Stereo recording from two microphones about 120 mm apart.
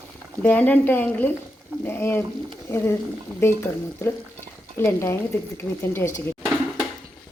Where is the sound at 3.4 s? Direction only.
20° left (ahead or behind).